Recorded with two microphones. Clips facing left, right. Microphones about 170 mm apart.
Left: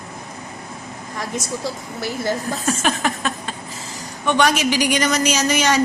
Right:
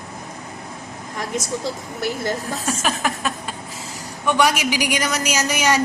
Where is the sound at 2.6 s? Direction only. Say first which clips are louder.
Left 2 dB; centre (ahead or behind).